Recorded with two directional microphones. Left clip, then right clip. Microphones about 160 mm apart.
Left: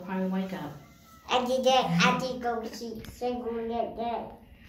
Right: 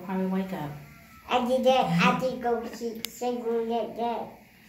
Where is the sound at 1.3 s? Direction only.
25° right (ahead or behind).